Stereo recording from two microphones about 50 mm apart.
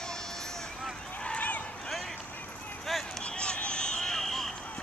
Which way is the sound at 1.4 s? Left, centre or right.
Left.